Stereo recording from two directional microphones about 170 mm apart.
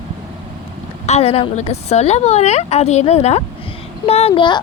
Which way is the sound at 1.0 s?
40° left (ahead or behind).